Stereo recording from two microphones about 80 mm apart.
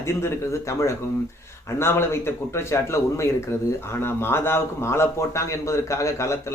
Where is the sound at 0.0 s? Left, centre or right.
Left.